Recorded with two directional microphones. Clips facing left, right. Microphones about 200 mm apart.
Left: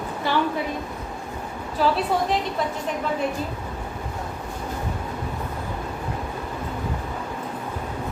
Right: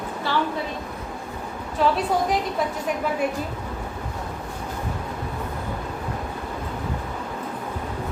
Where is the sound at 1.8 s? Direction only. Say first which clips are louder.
Right 1 dB; centre (ahead or behind).